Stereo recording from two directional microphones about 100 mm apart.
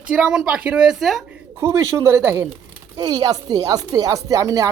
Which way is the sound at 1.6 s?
30° right (ahead or behind).